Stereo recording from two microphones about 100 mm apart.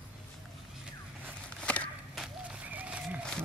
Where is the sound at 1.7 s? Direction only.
15° left (ahead or behind).